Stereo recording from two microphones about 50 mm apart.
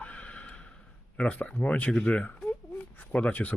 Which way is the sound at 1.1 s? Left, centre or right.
Left.